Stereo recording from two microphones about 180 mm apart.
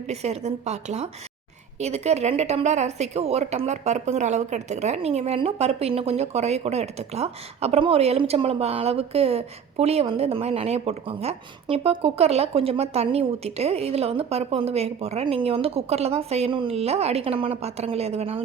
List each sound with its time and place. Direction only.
0.1 s a woman's voice: 35° right (ahead or behind)